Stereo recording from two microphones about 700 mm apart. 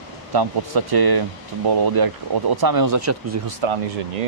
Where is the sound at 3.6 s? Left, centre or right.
Right.